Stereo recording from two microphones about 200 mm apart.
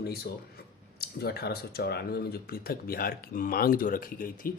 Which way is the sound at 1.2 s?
50° left (ahead or behind).